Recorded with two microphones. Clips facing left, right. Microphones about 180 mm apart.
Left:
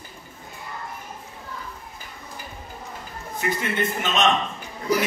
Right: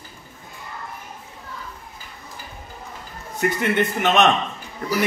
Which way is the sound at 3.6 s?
65° right (ahead or behind).